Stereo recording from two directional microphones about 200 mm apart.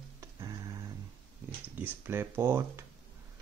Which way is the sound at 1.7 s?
10° right (ahead or behind).